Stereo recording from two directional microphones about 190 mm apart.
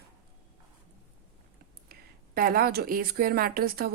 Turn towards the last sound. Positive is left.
turn(degrees=-50)  # may be behind; listen again after turning